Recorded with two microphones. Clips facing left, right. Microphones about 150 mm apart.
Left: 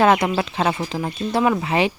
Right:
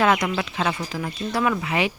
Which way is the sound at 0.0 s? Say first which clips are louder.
Left 4 dB; 30° left (ahead or behind).